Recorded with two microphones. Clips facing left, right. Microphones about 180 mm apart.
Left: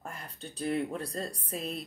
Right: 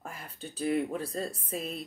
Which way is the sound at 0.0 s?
Centre (ahead or behind).